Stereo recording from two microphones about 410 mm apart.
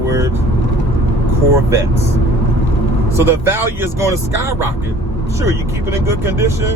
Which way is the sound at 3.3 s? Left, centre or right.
Centre.